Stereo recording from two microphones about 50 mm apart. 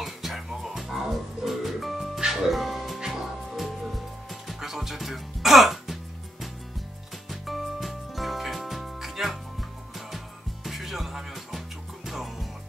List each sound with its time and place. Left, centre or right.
0.0 s music: centre
7.2 s music: centre